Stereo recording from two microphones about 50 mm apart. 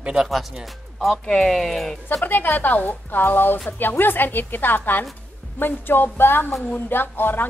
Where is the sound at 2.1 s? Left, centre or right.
Left.